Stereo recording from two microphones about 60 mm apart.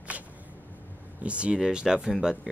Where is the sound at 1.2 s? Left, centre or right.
Centre.